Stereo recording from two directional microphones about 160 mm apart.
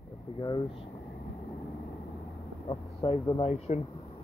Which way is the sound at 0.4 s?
30° left (ahead or behind).